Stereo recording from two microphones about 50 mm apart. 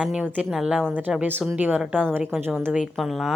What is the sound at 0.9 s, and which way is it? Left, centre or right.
A woman's voice, right.